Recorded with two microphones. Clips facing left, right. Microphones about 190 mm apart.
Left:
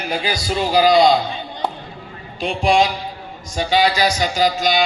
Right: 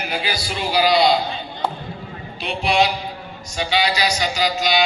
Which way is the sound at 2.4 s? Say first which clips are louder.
Left 3 dB; 45° left (ahead or behind).